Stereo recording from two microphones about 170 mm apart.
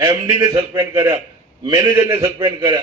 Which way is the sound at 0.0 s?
25° right (ahead or behind).